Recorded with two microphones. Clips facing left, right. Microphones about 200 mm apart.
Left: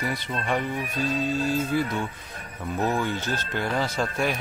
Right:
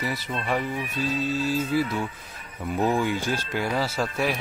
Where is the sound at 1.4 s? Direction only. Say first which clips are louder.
Even; 5° right (ahead or behind).